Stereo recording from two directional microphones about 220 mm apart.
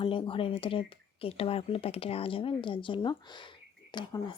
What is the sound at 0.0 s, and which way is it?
Speech, 25° left (ahead or behind).